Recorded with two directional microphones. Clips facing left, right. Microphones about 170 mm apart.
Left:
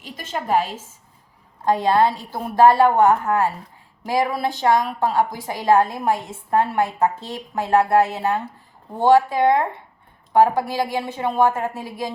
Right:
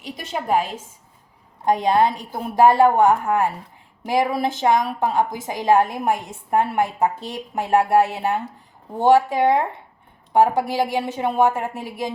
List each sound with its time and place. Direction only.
1.6 s a woman's voice: 15° right (ahead or behind)